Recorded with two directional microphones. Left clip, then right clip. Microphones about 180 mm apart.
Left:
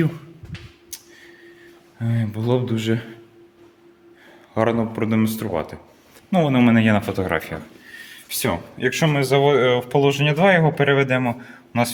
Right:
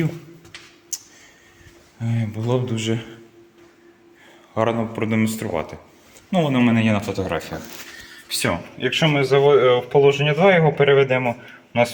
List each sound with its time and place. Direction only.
2.0 s speech: 35° left (ahead or behind)
4.5 s speech: 30° left (ahead or behind)
6.3 s speech: 35° left (ahead or behind)
8.8 s speech: 30° left (ahead or behind)